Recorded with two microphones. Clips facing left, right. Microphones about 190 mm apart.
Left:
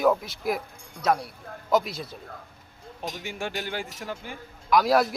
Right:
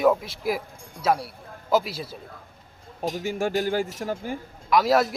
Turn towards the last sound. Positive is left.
turn(degrees=0)  # may be behind; listen again after turning